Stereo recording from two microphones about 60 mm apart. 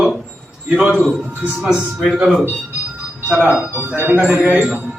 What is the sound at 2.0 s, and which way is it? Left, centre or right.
Speech, centre.